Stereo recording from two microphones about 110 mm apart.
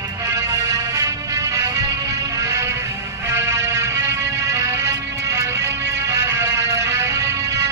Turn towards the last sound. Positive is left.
turn(degrees=-25)  # may be behind; listen again after turning